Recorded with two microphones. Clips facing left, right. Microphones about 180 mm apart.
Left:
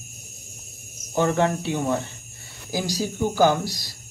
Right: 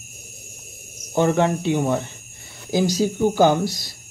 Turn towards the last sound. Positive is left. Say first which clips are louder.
# right 3 dB
turn(degrees=-25)  # may be behind; listen again after turning